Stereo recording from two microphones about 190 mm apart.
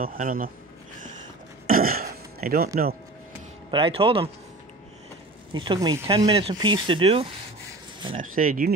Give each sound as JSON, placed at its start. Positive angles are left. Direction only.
{"t": 0.0, "sound": "speech", "side_deg": -50}
{"t": 1.7, "sound": "a sound", "side_deg": -50}
{"t": 3.7, "sound": "speech", "side_deg": -25}
{"t": 5.5, "sound": "speech", "side_deg": -25}
{"t": 8.2, "sound": "speech", "side_deg": -45}